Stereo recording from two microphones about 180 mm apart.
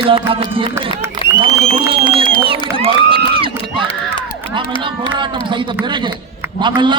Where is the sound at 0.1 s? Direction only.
30° right (ahead or behind).